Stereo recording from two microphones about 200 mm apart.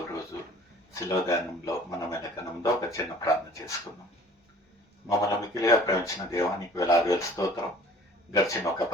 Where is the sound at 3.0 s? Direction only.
15° left (ahead or behind).